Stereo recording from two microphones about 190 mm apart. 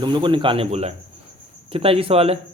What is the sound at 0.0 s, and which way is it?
Speech, 25° right (ahead or behind).